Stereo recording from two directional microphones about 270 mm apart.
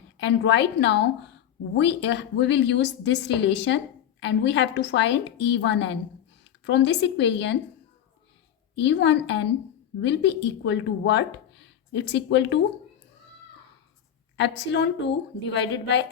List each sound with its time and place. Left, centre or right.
0.2 s a woman's voice: left
8.8 s a woman's voice: left
14.3 s a woman's voice: left